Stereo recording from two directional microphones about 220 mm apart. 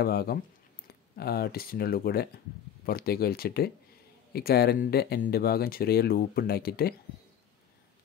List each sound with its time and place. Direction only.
0.0 s speech: 45° left (ahead or behind)